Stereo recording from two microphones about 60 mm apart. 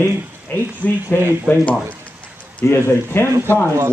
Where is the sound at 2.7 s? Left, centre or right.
Left.